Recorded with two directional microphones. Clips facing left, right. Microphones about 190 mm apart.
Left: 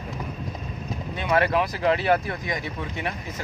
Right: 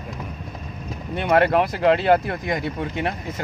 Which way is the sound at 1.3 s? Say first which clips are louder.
Right 4 dB; 55° right (ahead or behind).